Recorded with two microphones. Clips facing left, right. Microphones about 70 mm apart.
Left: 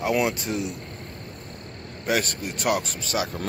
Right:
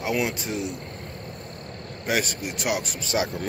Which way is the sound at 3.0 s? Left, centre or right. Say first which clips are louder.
Right 2 dB; right.